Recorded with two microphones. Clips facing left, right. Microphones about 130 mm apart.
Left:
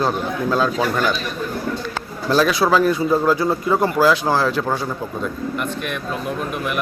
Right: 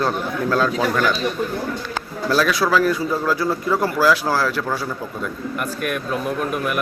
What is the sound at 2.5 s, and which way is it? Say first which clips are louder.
A man's voice: left 2 dB; 25° left (ahead or behind).